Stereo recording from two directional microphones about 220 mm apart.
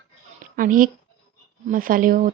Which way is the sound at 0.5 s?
40° right (ahead or behind).